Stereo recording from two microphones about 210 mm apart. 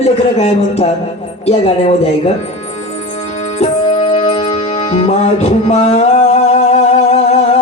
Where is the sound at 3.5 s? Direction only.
30° left (ahead or behind).